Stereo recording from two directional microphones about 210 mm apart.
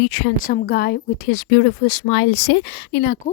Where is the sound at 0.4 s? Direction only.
45° left (ahead or behind).